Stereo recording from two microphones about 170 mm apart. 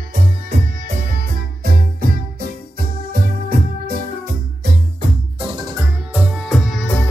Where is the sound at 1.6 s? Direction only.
65° right (ahead or behind).